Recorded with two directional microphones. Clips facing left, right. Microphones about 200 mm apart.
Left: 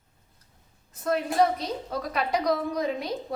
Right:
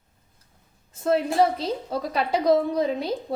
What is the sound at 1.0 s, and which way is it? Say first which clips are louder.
A woman's voice: right 3 dB; 30° right (ahead or behind).